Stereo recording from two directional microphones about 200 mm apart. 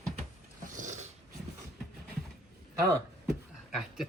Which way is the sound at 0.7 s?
40° right (ahead or behind).